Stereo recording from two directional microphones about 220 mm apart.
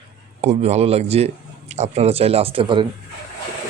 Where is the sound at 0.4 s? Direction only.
30° right (ahead or behind).